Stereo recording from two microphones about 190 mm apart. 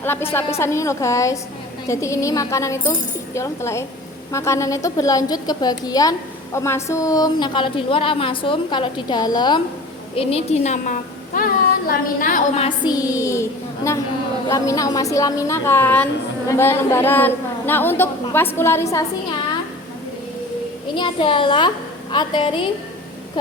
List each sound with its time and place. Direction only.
0.0 s a woman's voice: 10° left (ahead or behind)
10.2 s a woman's voice: 30° left (ahead or behind)
12.6 s a woman's voice: 20° left (ahead or behind)
20.9 s a woman's voice: 25° left (ahead or behind)